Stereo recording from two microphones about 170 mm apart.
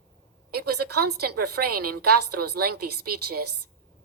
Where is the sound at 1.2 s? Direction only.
70° right (ahead or behind).